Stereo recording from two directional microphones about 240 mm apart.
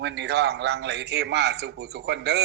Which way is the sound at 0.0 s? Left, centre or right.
Right.